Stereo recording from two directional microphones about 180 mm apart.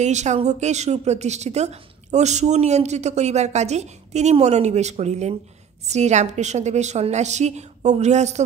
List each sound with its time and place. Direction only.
0.0 s a woman's voice: 40° right (ahead or behind)